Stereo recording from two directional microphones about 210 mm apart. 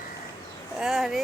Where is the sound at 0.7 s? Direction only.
Centre (ahead or behind).